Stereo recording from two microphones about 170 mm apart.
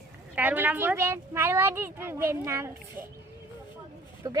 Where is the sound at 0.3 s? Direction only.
10° right (ahead or behind).